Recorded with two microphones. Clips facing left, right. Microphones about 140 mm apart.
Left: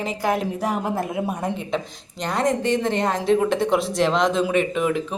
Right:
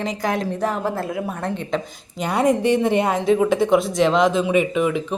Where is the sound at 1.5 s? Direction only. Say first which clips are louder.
Right 2 dB; centre (ahead or behind).